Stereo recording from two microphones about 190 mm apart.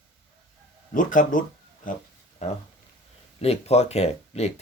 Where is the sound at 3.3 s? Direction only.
35° left (ahead or behind).